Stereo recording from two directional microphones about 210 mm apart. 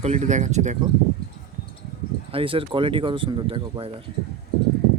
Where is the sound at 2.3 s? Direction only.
25° right (ahead or behind).